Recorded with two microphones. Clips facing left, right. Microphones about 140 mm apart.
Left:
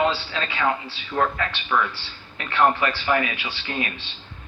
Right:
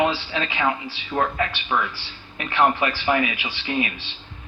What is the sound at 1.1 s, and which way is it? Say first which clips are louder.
Speech: even; 30° right (ahead or behind).